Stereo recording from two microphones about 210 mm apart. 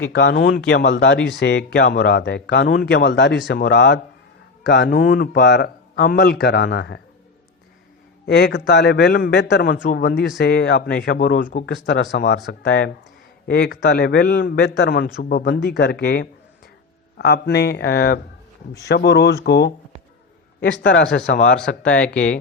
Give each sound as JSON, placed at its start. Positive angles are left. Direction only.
{"t": 0.1, "sound": "a man's voice", "side_deg": 55}
{"t": 8.3, "sound": "a man's voice", "side_deg": 50}
{"t": 11.6, "sound": "a man's voice", "side_deg": 55}
{"t": 22.0, "sound": "speech", "side_deg": 5}